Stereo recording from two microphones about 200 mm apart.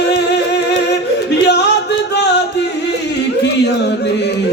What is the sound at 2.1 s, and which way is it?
Music, 60° left (ahead or behind).